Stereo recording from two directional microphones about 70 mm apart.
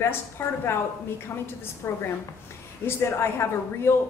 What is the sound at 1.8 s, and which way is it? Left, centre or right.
Speech, left.